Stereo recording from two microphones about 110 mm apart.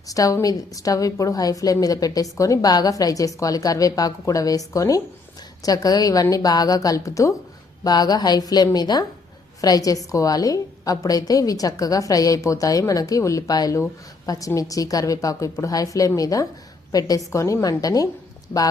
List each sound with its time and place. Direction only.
0.1 s a woman's voice: 30° left (ahead or behind)